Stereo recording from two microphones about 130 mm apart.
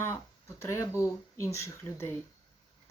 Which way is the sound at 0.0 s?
20° left (ahead or behind).